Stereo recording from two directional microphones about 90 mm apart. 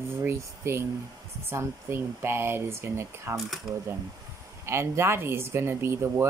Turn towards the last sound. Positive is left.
turn(degrees=-30)  # may be behind; listen again after turning